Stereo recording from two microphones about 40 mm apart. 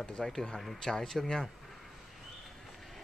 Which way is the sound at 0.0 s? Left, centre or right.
Left.